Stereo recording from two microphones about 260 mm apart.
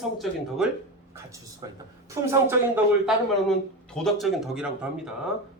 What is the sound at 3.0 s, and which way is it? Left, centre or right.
A man's voice, centre.